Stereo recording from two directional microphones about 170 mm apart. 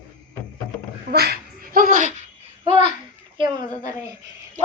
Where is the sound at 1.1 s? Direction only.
70° right (ahead or behind); by 2.2 s 45° right (ahead or behind).